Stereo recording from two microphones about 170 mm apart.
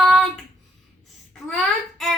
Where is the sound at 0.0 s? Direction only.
Centre (ahead or behind).